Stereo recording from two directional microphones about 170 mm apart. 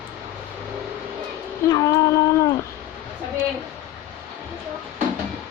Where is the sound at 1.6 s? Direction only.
20° left (ahead or behind).